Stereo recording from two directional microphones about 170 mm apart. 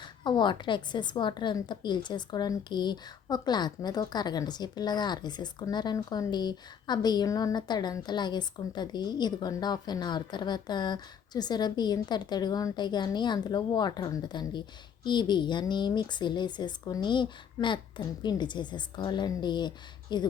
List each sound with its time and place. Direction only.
0.3 s a woman's voice: 25° left (ahead or behind)